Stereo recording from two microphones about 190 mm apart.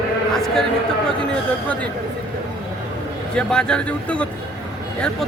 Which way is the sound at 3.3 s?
5° left (ahead or behind).